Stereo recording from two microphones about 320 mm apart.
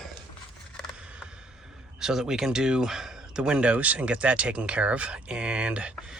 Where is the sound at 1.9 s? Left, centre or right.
Centre.